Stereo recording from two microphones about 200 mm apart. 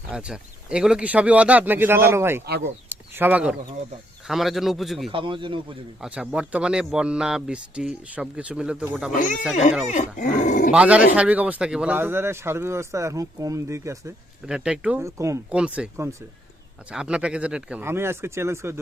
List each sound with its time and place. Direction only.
0.1 s speech: 5° right (ahead or behind)
2.9 s a sound: 10° right (ahead or behind)
4.3 s speech: centre (ahead or behind)
5.1 s speech: 25° right (ahead or behind)
6.0 s speech: 5° right (ahead or behind)
9.9 s speech: 40° left (ahead or behind)
10.7 s speech: 5° right (ahead or behind)
14.4 s speech: 5° right (ahead or behind)